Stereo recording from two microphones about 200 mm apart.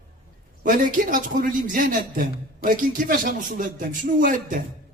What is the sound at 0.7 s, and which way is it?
Speech, 40° right (ahead or behind).